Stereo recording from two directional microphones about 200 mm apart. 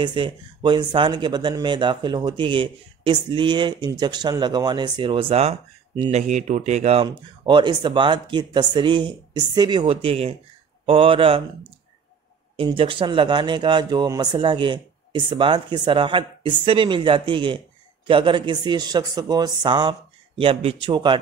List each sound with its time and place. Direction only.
0.0 s speech: 25° right (ahead or behind)
12.5 s speech: 25° right (ahead or behind)